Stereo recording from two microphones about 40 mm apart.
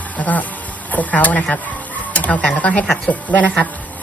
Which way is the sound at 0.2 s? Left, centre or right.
Left.